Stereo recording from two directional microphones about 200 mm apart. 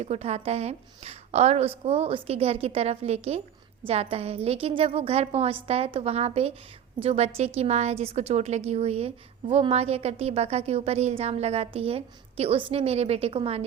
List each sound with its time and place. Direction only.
0.0 s a woman's voice: 30° right (ahead or behind)